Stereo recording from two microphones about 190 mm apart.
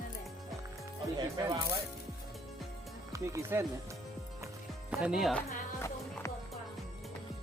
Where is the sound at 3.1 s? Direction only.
15° right (ahead or behind); by 5.5 s centre (ahead or behind).